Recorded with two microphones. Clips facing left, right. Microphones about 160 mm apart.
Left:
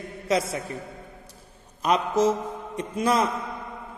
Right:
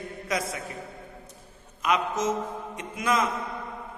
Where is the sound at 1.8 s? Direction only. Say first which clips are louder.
Left 4 dB; 35° left (ahead or behind).